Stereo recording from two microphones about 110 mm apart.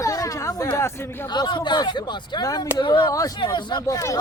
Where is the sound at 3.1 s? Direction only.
30° left (ahead or behind).